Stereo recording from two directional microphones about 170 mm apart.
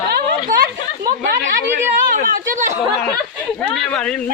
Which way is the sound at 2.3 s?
55° right (ahead or behind).